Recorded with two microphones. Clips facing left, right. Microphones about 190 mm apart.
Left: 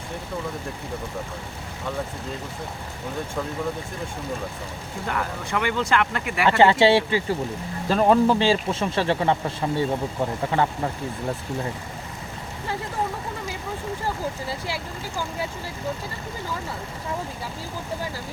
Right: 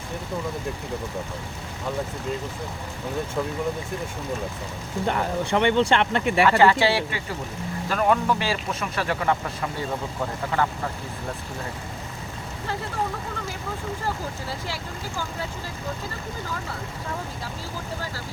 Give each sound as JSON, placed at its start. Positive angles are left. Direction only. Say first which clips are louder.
{"t": 5.0, "sound": "speech", "louder": "right 4 dB", "side_deg": -30}
{"t": 6.4, "sound": "speech", "louder": "left 2 dB", "side_deg": 25}